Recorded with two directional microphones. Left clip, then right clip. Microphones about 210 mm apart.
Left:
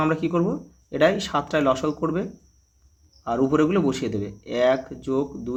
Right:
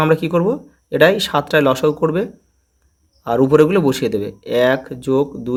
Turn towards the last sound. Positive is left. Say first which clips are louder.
# right 8 dB
turn(degrees=-45)  # may be behind; listen again after turning